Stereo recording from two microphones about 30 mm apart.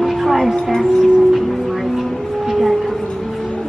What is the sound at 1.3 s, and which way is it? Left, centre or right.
Music, centre.